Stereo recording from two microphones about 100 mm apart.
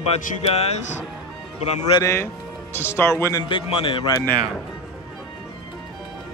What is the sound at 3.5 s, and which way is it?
Speech, 60° left (ahead or behind).